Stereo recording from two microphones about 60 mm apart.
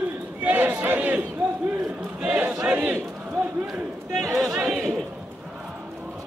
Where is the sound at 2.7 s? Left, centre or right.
Right.